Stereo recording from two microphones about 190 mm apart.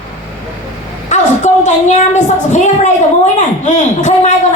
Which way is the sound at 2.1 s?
40° left (ahead or behind).